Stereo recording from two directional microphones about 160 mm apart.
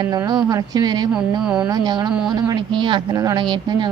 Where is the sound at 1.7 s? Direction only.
25° right (ahead or behind).